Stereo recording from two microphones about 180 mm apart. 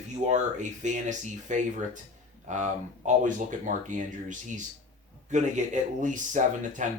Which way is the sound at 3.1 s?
45° right (ahead or behind).